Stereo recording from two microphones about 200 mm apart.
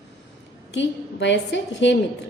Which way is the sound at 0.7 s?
65° left (ahead or behind).